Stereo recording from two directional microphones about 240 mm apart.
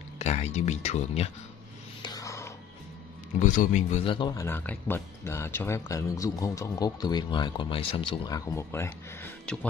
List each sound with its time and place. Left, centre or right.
0.2 s speech: left
2.0 s music: centre
3.3 s speech: left; by 9.7 s centre